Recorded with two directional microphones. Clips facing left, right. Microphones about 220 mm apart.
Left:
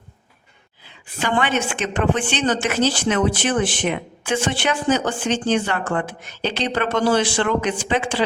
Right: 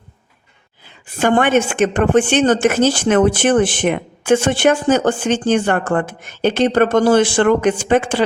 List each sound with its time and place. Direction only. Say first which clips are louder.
1.2 s a woman's voice: right 7 dB; 50° right (ahead or behind)